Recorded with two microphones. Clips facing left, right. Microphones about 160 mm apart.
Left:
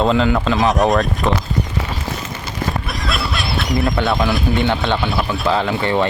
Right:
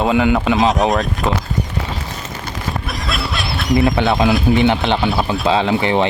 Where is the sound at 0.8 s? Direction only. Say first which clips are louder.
Left 1 dB; centre (ahead or behind).